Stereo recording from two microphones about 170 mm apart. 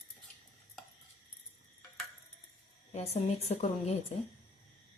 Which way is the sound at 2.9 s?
40° left (ahead or behind).